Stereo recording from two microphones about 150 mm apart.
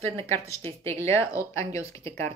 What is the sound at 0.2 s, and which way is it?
Speech, 20° left (ahead or behind).